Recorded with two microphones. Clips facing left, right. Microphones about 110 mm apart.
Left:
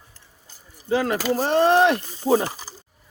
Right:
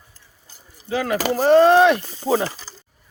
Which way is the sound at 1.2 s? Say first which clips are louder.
Right 2 dB; 80° right.